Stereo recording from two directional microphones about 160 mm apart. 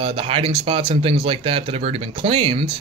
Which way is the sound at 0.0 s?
35° right (ahead or behind).